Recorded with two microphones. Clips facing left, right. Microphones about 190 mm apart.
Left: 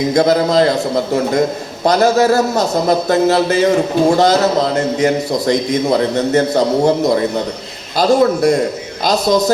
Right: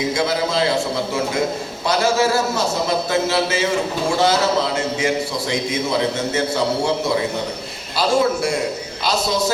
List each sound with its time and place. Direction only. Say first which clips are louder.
0.1 s a man's voice: left 8 dB; 45° left (ahead or behind)